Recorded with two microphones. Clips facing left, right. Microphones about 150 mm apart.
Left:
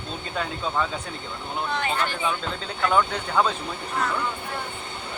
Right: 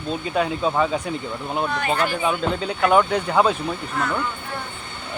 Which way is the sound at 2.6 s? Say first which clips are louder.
Right 4 dB; 15° right (ahead or behind).